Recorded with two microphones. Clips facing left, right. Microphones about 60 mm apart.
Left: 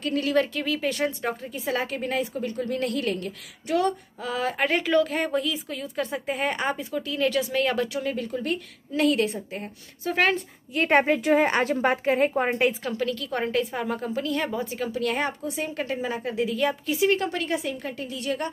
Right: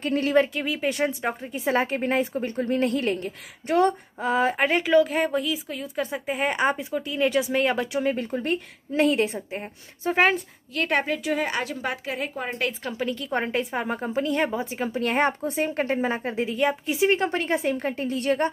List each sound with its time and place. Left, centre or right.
0.0 s a woman's voice: right
0.5 s a woman's voice: centre
4.6 s a woman's voice: centre
10.7 s a woman's voice: left
13.0 s a woman's voice: right